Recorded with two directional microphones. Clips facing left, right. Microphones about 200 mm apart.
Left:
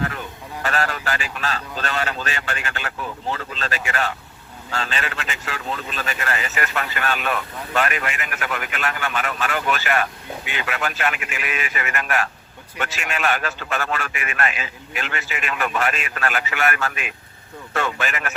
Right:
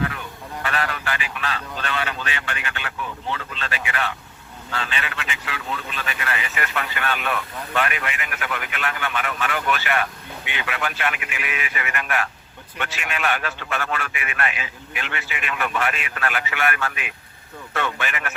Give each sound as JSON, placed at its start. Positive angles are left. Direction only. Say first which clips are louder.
{"t": 0.6, "sound": "a man's voice", "louder": "left 3 dB", "side_deg": 40}